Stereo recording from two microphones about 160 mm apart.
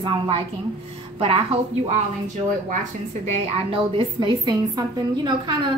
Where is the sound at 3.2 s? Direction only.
40° right (ahead or behind).